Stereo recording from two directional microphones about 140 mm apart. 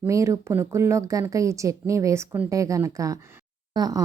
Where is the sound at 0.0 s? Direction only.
20° right (ahead or behind).